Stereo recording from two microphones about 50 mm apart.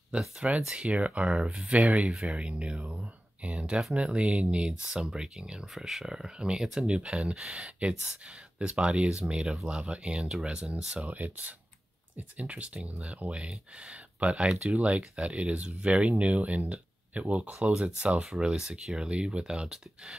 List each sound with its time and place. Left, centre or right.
0.6 s speech: centre
0.8 s speech: right
1.4 s speech: centre
1.7 s speech: right
11.1 s speech: right
17.6 s speech: centre